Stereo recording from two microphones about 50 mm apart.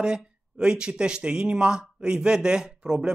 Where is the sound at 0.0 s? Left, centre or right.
Centre.